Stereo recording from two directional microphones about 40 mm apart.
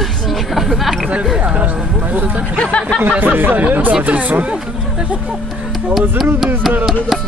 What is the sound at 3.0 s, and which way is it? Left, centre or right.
Speech, right.